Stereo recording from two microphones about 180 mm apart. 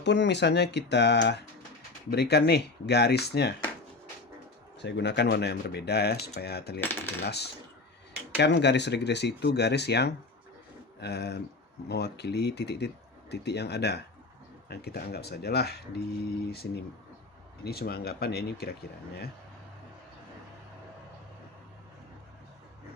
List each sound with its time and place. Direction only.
0.0 s speech: 75° left (ahead or behind)
4.8 s speech: 75° left (ahead or behind)
6.7 s cutlery: 10° left (ahead or behind)
7.3 s speech: 65° left (ahead or behind)